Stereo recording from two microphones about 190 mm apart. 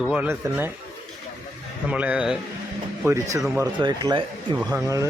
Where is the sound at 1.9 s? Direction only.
5° right (ahead or behind); by 4.2 s 20° right (ahead or behind).